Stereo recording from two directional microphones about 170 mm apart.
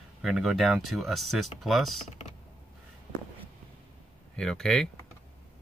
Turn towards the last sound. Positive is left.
turn(degrees=5)  # may be behind; listen again after turning